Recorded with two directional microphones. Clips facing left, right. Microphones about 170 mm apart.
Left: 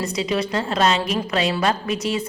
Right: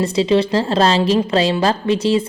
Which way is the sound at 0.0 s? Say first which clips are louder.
Right 8 dB; 30° right (ahead or behind).